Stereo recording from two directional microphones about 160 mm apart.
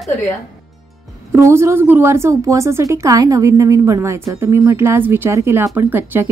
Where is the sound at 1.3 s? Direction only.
15° right (ahead or behind).